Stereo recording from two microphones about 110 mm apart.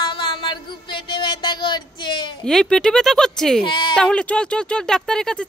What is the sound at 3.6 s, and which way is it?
Speech, 45° left (ahead or behind).